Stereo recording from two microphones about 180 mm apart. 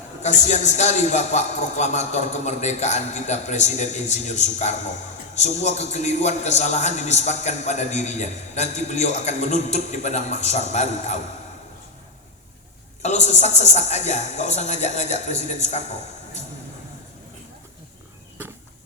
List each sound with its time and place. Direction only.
0.2 s a man's voice: 40° left (ahead or behind)
13.0 s a man's voice: 40° left (ahead or behind)